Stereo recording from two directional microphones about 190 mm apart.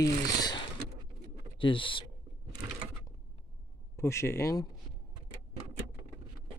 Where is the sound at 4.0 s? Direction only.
15° left (ahead or behind).